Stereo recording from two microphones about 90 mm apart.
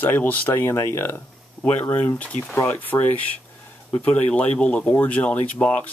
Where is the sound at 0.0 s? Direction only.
20° left (ahead or behind).